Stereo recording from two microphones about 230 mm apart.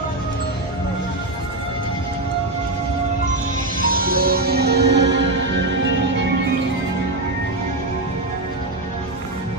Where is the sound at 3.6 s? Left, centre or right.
Right.